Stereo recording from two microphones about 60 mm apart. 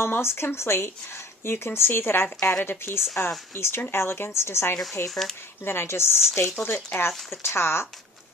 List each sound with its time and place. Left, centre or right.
0.0 s speech: left